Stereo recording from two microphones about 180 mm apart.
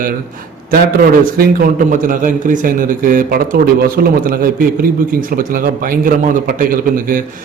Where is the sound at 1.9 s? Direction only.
50° right (ahead or behind).